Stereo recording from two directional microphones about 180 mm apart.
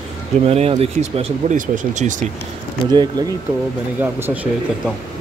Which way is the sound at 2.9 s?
25° right (ahead or behind).